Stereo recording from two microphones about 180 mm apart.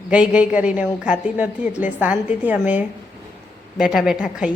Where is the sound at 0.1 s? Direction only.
5° right (ahead or behind).